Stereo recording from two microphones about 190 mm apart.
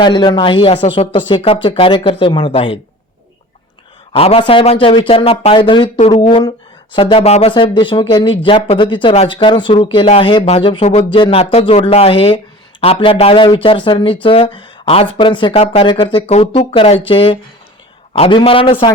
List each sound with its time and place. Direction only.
0.0 s speech: 25° left (ahead or behind)
4.1 s speech: 30° left (ahead or behind)